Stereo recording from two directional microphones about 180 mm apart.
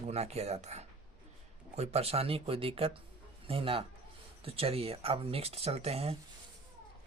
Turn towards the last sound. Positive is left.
turn(degrees=-35)  # may be behind; listen again after turning